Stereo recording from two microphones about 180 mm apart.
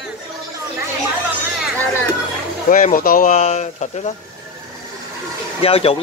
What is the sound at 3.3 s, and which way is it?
Speech, 35° left (ahead or behind).